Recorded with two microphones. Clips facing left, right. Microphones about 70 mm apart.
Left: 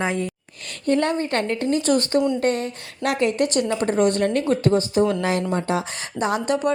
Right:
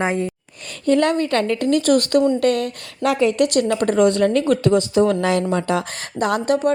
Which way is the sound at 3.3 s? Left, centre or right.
Right.